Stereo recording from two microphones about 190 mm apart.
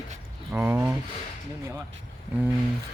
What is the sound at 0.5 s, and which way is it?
Speech, 10° right (ahead or behind).